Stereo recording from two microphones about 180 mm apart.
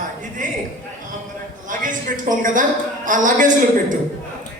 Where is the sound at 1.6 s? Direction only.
45° right (ahead or behind).